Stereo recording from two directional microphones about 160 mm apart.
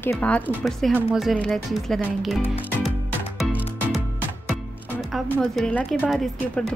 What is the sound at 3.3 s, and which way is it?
Music, centre (ahead or behind).